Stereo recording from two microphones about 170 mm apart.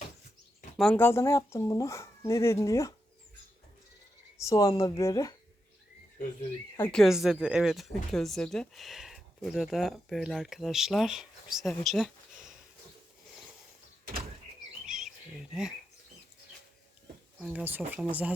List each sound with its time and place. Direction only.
0.8 s speech: 10° left (ahead or behind)
4.4 s speech: 20° left (ahead or behind)
6.7 s speech: 10° left (ahead or behind)
7.0 s speech: centre (ahead or behind)
14.8 s bird: 5° right (ahead or behind)
17.4 s speech: 10° right (ahead or behind)